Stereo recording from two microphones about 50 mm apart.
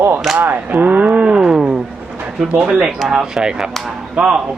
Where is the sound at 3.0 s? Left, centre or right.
Centre.